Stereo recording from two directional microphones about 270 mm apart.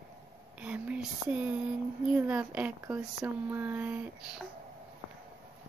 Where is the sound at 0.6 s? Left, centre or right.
Centre.